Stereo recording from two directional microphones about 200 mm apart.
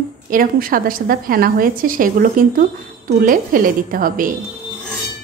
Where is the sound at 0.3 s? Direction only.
45° right (ahead or behind).